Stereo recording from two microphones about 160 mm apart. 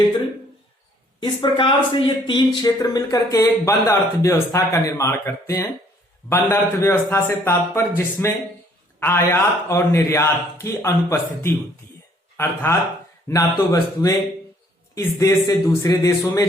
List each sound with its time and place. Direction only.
1.2 s a man's voice: 30° left (ahead or behind)
13.2 s speech: 20° left (ahead or behind)